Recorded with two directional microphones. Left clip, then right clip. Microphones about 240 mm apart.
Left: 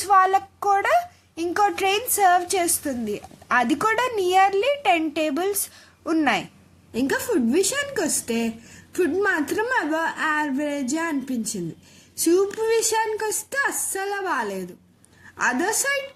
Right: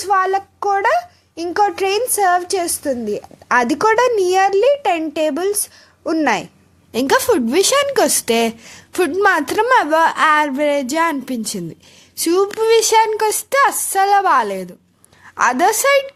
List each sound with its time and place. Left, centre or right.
0.0 s a child's voice: centre
6.9 s a woman's voice: right